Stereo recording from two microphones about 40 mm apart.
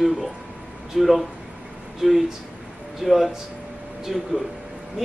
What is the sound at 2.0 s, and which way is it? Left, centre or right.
Speech, centre.